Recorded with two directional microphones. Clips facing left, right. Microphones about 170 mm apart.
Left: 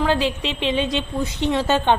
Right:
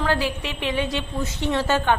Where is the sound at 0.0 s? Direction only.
20° left (ahead or behind).